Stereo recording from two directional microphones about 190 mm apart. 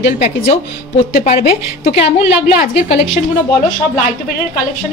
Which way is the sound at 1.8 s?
35° left (ahead or behind).